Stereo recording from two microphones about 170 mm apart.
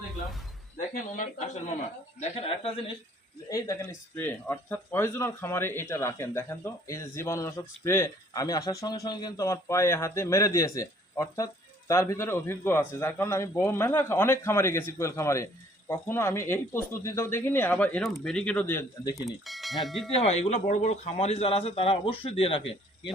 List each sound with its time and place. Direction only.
1.1 s speech: 45° left (ahead or behind)
3.5 s speech: 15° left (ahead or behind)
19.1 s speech: centre (ahead or behind)
20.1 s speech: 40° left (ahead or behind)